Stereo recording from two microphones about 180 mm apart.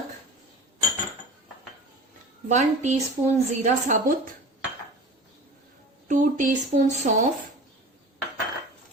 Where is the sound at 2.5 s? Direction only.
40° right (ahead or behind).